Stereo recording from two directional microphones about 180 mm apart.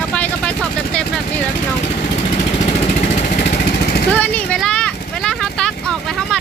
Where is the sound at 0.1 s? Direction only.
5° left (ahead or behind).